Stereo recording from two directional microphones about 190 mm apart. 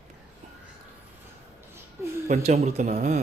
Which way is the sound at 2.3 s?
40° right (ahead or behind).